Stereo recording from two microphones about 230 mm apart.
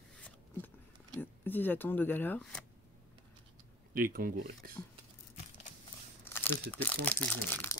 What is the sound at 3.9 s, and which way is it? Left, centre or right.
Speech, right.